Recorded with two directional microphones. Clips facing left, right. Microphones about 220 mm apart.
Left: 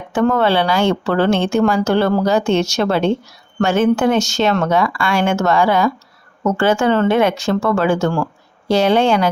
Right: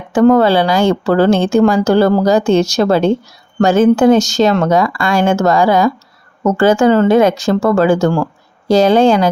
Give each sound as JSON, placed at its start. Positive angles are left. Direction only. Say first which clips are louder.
{"t": 0.1, "sound": "speech", "louder": "right 6 dB", "side_deg": -35}